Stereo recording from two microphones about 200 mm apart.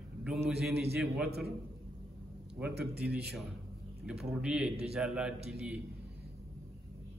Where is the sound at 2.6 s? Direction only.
5° right (ahead or behind).